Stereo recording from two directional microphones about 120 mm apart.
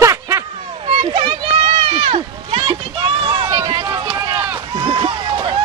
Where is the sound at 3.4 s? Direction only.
35° right (ahead or behind).